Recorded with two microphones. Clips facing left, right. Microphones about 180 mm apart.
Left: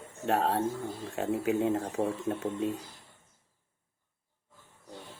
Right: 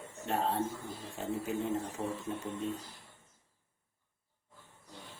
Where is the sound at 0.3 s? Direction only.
75° left (ahead or behind).